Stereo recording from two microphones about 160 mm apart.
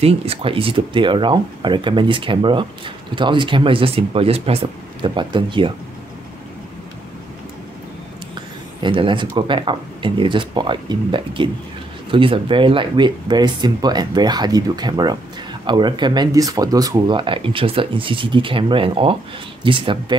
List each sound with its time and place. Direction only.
0.0 s speech: 40° right (ahead or behind)
8.8 s speech: 30° right (ahead or behind)